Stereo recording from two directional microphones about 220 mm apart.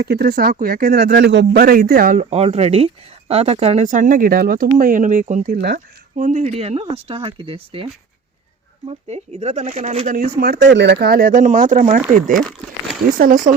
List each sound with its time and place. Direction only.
0.1 s speech: 45° right (ahead or behind)
2.3 s speech: 30° right (ahead or behind)
8.9 s speech: 30° right (ahead or behind)
12.4 s crumpling: centre (ahead or behind)
13.1 s speech: 40° right (ahead or behind)